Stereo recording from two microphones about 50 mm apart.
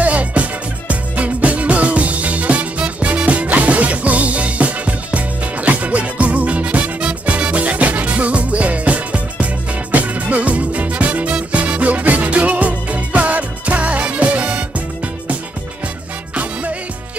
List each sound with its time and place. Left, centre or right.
0.0 s music: right